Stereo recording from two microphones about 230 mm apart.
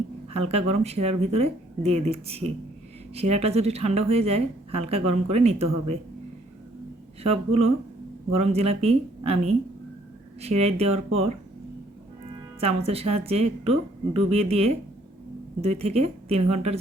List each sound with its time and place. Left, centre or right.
0.3 s a woman's voice: right
7.2 s a woman's voice: right
12.5 s a woman's voice: right